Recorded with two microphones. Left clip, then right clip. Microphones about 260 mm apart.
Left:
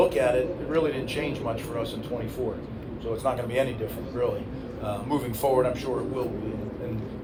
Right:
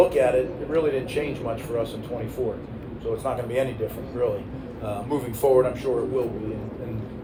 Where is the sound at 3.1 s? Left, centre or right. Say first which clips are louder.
Even; left.